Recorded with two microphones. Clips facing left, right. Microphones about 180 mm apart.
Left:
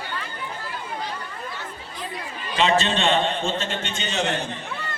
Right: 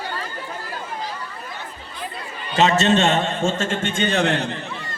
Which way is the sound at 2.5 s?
45° right (ahead or behind).